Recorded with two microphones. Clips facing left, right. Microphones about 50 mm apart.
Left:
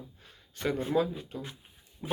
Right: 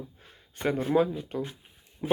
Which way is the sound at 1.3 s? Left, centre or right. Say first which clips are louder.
Right 7 dB; right.